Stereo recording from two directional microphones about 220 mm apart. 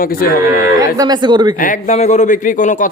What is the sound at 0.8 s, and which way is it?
Speech, 15° right (ahead or behind).